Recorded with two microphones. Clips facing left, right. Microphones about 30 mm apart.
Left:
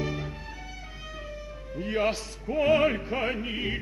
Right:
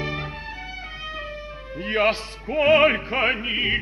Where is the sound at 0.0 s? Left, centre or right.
Right.